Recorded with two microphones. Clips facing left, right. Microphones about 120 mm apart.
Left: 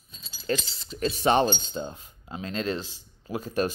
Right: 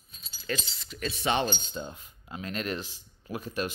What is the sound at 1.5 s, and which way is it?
Speech, 25° left (ahead or behind).